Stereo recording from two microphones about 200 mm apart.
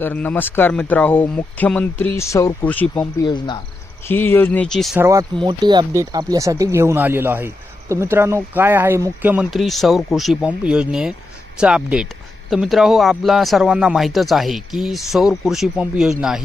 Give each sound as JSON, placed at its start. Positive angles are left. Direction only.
{"t": 0.0, "sound": "speech", "side_deg": 10}
{"t": 3.2, "sound": "cricket", "side_deg": 20}
{"t": 4.0, "sound": "speech", "side_deg": 10}
{"t": 4.9, "sound": "speech", "side_deg": -15}